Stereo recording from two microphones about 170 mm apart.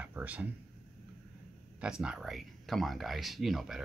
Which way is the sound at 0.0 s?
10° right (ahead or behind).